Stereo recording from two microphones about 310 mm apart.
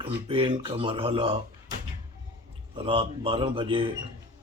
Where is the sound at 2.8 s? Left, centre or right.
Centre.